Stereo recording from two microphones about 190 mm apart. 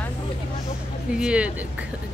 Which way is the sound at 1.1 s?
5° right (ahead or behind).